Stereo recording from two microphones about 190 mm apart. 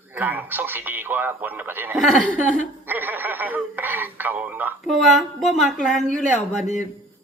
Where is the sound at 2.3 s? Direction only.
40° left (ahead or behind).